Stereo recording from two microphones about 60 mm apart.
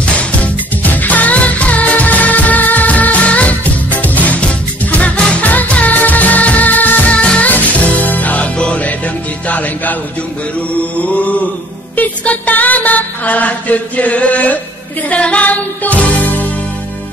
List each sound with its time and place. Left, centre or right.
0.0 s music: left
11.0 s mantra: left
12.0 s music: left